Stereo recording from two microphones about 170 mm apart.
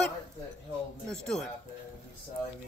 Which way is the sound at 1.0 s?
5° left (ahead or behind).